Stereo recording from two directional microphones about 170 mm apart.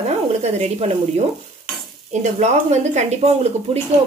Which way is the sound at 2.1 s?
40° right (ahead or behind).